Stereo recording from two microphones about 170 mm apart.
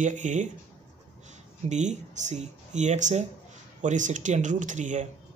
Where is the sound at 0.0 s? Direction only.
45° right (ahead or behind).